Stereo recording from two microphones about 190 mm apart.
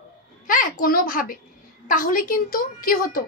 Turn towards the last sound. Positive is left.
turn(degrees=50)  # may be behind; listen again after turning